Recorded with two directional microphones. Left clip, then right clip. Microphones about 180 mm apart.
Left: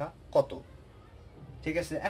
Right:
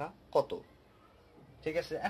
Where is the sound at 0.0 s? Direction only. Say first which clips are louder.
Left 4 dB; 35° right (ahead or behind).